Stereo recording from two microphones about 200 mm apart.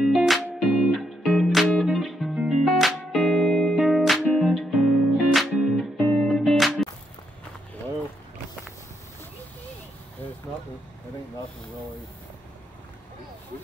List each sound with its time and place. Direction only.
0.0 s music: centre (ahead or behind)